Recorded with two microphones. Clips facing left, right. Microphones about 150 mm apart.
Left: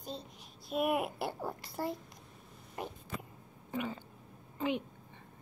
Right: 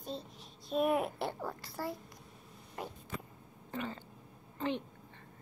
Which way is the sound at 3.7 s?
10° left (ahead or behind).